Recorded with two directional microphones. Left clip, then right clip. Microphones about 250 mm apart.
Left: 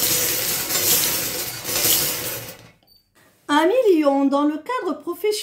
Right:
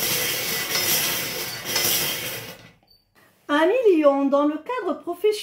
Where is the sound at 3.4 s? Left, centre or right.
Left.